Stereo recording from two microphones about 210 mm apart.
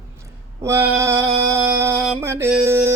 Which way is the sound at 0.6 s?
15° right (ahead or behind).